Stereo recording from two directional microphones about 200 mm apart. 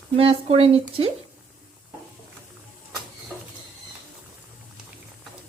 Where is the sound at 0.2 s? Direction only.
30° right (ahead or behind).